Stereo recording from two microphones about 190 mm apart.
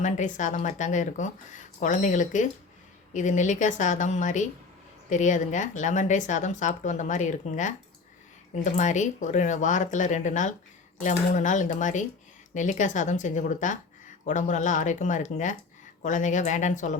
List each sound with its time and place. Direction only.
0.0 s speech: 40° left (ahead or behind)